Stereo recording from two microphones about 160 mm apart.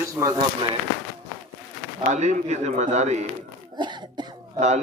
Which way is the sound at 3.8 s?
30° right (ahead or behind).